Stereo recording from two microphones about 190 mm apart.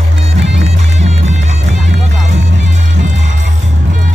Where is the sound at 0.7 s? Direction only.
35° right (ahead or behind).